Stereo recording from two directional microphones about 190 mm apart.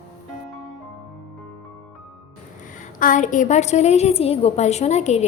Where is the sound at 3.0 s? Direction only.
45° left (ahead or behind).